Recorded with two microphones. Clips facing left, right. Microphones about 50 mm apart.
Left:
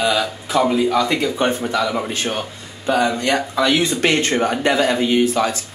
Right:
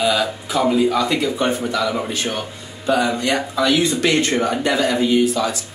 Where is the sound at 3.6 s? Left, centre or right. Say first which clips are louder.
Right 1 dB; left.